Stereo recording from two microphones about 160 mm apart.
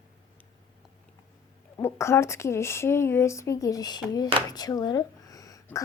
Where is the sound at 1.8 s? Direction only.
15° left (ahead or behind).